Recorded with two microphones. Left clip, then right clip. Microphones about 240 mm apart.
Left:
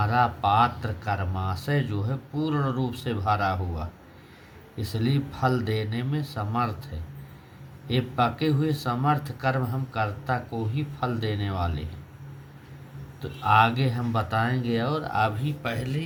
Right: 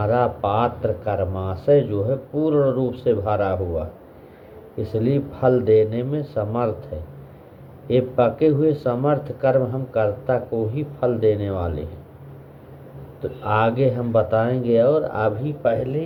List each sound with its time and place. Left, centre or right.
0.0 s speech: left
7.9 s speech: left
13.4 s speech: left